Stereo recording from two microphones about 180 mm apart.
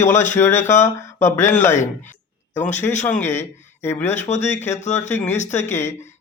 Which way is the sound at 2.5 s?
15° left (ahead or behind).